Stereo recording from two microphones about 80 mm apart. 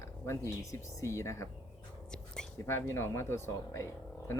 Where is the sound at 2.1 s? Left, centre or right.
Centre.